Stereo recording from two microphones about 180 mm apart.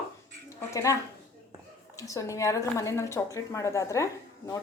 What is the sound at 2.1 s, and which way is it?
A woman's voice, 15° left (ahead or behind).